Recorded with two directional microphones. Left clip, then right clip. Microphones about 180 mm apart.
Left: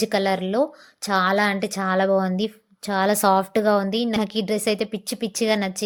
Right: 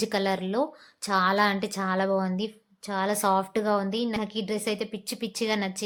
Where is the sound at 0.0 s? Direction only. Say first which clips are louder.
Left 5 dB; 20° left (ahead or behind).